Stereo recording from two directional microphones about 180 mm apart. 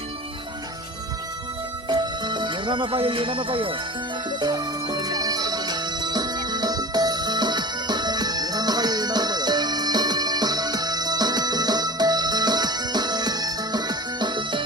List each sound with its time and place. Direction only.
1.9 s music: 25° right (ahead or behind)